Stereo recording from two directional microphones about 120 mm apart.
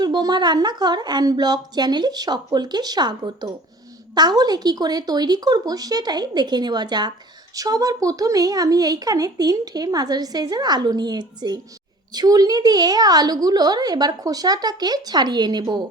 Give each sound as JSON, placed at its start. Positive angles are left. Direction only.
{"t": 0.0, "sound": "a woman's voice", "side_deg": -35}